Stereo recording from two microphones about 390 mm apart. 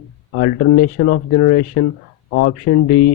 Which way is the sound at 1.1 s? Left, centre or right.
Left.